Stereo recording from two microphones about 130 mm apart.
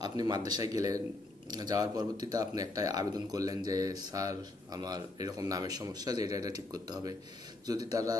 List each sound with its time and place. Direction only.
0.0 s speech: 30° right (ahead or behind)